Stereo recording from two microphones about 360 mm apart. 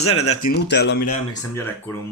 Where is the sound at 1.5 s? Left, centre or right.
Centre.